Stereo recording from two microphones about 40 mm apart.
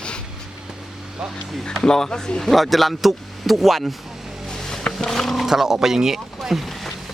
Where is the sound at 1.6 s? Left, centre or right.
Centre.